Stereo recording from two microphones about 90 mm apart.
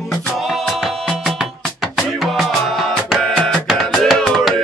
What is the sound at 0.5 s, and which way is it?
Music, centre (ahead or behind).